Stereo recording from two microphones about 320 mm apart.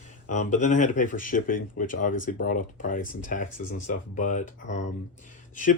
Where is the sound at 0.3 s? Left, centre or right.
Left.